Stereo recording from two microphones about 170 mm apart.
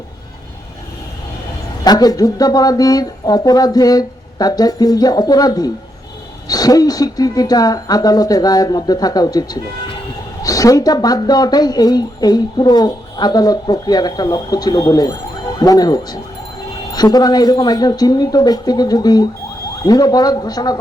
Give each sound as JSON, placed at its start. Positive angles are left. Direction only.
{"t": 1.8, "sound": "speech", "side_deg": 20}